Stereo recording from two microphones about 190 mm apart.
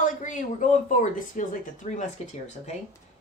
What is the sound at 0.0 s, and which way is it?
Speech, 40° left (ahead or behind).